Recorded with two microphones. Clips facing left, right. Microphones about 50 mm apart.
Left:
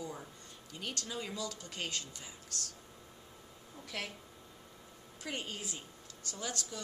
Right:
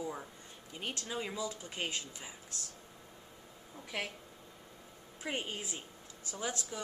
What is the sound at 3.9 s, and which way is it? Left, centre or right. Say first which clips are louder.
Speech: right 2 dB; centre.